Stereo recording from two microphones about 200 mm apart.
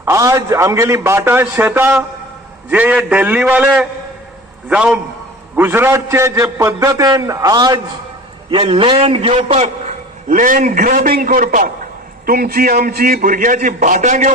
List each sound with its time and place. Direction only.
0.0 s a man's voice: 15° right (ahead or behind); by 14.3 s 40° right (ahead or behind)